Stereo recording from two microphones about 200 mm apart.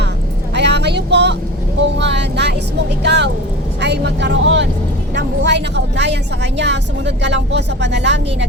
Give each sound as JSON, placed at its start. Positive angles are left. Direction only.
{"t": 0.5, "sound": "vehicle", "side_deg": -60}
{"t": 5.1, "sound": "a woman's voice", "side_deg": -60}